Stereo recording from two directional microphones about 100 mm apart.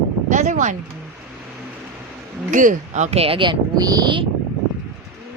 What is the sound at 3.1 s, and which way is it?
Speech, 70° right (ahead or behind).